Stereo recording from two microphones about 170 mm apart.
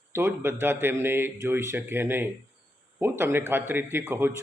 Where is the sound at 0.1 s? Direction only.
15° right (ahead or behind).